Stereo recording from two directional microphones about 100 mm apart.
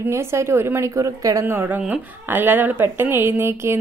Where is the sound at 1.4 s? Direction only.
20° right (ahead or behind).